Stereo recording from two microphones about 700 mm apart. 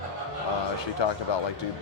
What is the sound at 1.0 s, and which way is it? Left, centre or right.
Speech, left.